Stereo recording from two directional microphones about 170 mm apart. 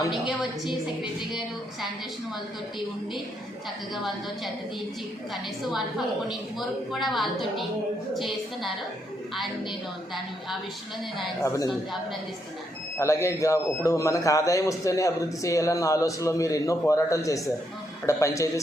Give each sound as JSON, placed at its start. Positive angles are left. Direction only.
{"t": 0.1, "sound": "a woman's voice", "side_deg": 0}
{"t": 3.9, "sound": "a woman's voice", "side_deg": 0}
{"t": 6.2, "sound": "a woman's voice", "side_deg": 0}
{"t": 11.4, "sound": "a man's voice", "side_deg": 20}
{"t": 13.0, "sound": "a man's voice", "side_deg": 15}